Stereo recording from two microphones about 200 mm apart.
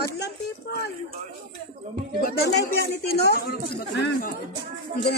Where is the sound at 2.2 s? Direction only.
50° left (ahead or behind).